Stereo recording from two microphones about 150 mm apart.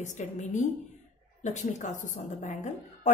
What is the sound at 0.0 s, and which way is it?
A woman's voice, 55° left (ahead or behind).